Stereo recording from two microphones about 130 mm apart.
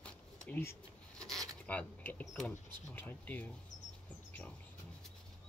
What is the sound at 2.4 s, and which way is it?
Speech, 15° left (ahead or behind).